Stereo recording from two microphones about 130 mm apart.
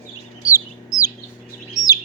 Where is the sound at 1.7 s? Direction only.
30° left (ahead or behind).